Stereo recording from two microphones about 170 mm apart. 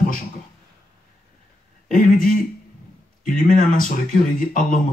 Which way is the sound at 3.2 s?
55° left (ahead or behind).